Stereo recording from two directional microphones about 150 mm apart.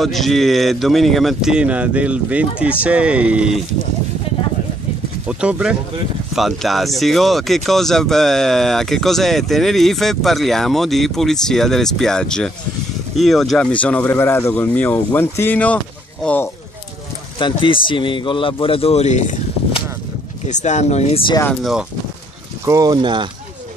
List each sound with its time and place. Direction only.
0.0 s speech: centre (ahead or behind)
5.3 s speech: 5° right (ahead or behind); by 16.4 s 10° left (ahead or behind)
17.4 s a man's voice: 35° left (ahead or behind); by 19.3 s 50° left (ahead or behind)
20.4 s a man's voice: 50° left (ahead or behind)
22.7 s speech: 25° right (ahead or behind)